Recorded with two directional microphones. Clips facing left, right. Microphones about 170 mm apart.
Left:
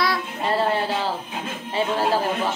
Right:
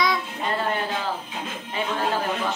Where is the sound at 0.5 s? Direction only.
30° left (ahead or behind).